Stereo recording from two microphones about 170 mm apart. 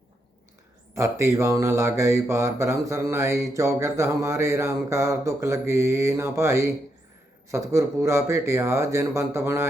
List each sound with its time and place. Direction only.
0.9 s speech: 20° right (ahead or behind)